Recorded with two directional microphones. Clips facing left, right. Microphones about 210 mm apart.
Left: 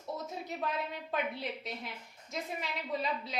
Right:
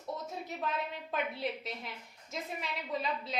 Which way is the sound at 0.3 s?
Centre (ahead or behind).